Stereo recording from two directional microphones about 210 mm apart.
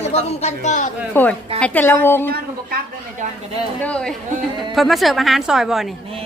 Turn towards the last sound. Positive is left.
turn(degrees=0)  # may be behind; listen again after turning